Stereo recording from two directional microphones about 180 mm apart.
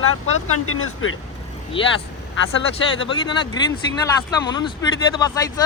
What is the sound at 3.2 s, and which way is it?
Speech, 25° left (ahead or behind).